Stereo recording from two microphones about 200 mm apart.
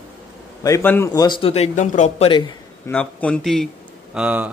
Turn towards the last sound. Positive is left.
turn(degrees=-5)  # may be behind; listen again after turning